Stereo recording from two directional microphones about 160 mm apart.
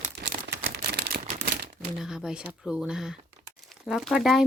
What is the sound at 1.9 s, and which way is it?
Speech, 5° right (ahead or behind).